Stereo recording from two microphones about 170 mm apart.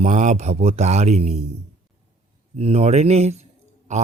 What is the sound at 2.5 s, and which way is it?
Speech, 40° right (ahead or behind).